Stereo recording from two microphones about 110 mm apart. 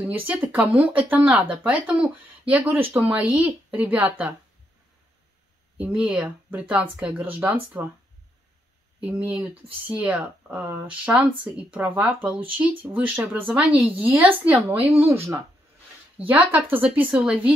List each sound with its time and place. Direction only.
0.1 s speech: 15° right (ahead or behind)
5.8 s speech: 10° right (ahead or behind)
9.0 s speech: 15° right (ahead or behind)
16.3 s speech: 15° right (ahead or behind)